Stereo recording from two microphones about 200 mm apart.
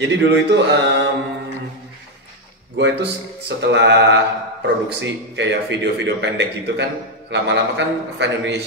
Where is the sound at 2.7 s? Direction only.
60° right (ahead or behind).